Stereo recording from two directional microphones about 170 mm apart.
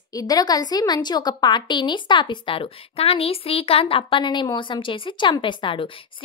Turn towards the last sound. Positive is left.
turn(degrees=30)  # may be behind; listen again after turning